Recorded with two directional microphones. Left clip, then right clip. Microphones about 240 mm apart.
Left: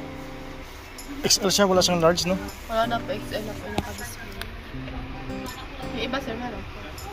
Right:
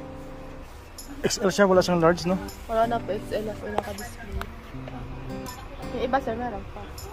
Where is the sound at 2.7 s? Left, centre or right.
Right.